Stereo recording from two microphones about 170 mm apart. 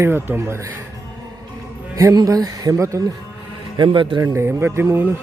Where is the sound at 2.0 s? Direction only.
20° right (ahead or behind).